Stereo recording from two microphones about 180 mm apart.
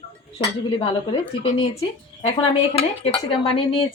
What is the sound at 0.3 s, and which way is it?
Speech, 30° left (ahead or behind).